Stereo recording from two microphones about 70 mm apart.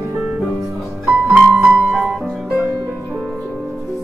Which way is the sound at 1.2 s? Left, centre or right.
Centre.